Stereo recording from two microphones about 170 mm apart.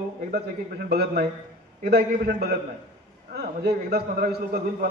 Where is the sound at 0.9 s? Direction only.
65° right (ahead or behind).